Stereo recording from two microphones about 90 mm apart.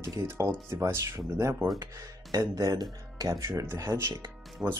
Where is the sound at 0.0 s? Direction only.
35° right (ahead or behind).